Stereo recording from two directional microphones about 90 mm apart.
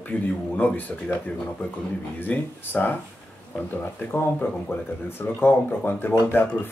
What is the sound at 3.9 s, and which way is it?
Speech, 20° left (ahead or behind).